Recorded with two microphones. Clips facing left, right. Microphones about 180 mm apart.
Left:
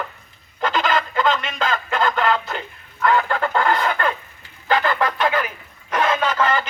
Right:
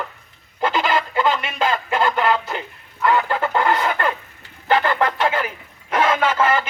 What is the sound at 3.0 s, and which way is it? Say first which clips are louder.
Chicken: even; 15° right (ahead or behind).